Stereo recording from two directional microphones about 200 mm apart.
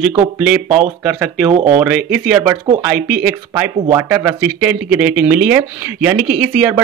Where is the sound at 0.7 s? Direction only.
35° right (ahead or behind).